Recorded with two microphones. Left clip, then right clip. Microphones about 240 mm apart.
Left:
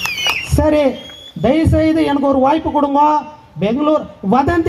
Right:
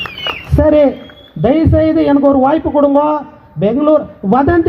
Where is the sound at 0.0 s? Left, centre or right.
Left.